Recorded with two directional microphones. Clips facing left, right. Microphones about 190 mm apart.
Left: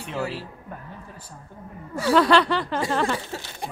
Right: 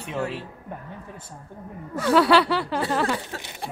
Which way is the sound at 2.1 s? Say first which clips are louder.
Even; 5° right (ahead or behind).